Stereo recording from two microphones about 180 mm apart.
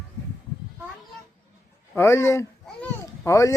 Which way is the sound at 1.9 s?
15° left (ahead or behind).